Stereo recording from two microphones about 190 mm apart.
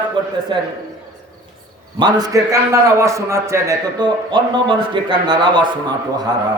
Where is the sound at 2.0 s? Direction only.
20° right (ahead or behind).